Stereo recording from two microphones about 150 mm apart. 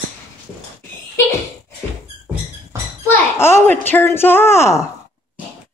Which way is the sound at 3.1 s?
15° left (ahead or behind).